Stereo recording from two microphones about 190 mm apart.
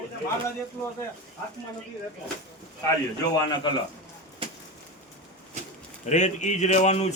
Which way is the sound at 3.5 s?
25° left (ahead or behind).